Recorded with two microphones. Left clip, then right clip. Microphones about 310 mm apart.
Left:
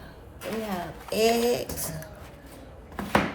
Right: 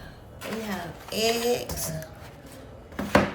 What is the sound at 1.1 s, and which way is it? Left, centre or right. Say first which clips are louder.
Speech: left 2 dB; centre.